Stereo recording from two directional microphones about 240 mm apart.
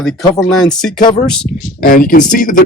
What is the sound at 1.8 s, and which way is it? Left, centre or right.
Speech, left.